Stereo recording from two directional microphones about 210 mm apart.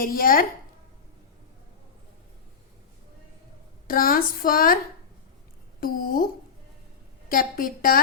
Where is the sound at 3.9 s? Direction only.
40° left (ahead or behind).